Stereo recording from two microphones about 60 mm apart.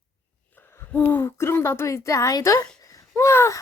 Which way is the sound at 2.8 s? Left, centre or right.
Left.